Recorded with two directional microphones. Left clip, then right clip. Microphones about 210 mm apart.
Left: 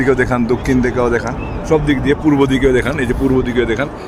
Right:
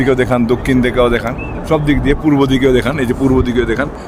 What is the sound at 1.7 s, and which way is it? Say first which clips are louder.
A man's voice: even; 55° right (ahead or behind).